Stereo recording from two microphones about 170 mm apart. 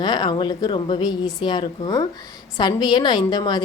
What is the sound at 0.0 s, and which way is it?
A woman's voice, 25° left (ahead or behind).